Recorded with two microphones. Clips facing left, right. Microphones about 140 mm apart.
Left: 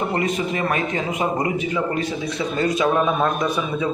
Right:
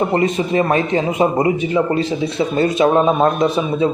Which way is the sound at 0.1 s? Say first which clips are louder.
Right 6 dB; 25° right (ahead or behind).